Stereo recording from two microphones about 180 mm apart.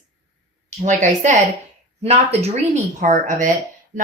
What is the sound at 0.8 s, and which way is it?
Speech, 40° right (ahead or behind).